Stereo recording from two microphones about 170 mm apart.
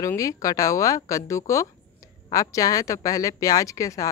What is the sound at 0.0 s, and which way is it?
A woman's voice, 20° left (ahead or behind).